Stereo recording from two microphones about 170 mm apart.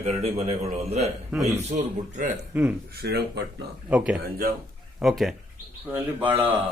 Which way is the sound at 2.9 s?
65° right (ahead or behind).